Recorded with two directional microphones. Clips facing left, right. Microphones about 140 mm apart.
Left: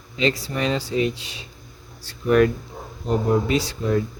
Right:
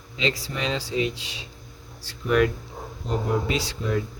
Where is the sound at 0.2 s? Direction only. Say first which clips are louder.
Left 5 dB; 50° left (ahead or behind).